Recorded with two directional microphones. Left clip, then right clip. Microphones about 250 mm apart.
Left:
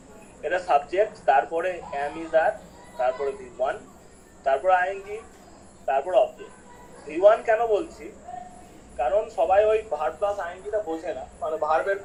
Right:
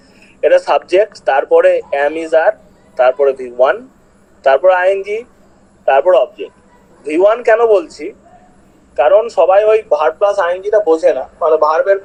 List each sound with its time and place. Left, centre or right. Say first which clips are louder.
0.4 s a man's voice: right 12 dB; right